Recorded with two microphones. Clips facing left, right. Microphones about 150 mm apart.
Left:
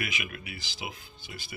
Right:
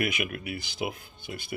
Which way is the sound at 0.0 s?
50° right (ahead or behind).